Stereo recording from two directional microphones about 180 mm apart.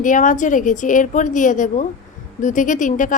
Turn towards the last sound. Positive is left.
turn(degrees=45)  # may be behind; listen again after turning